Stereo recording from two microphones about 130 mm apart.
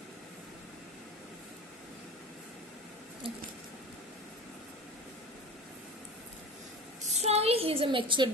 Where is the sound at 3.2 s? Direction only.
45° right (ahead or behind).